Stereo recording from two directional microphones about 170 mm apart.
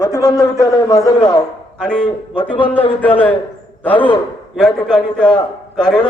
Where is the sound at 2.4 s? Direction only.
30° left (ahead or behind).